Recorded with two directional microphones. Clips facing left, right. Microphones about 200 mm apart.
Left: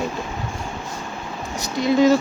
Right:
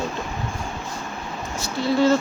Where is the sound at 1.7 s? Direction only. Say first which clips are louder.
Left 3 dB; 15° left (ahead or behind).